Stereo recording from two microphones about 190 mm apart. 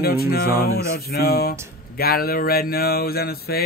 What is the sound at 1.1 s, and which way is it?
Speech, 55° left (ahead or behind).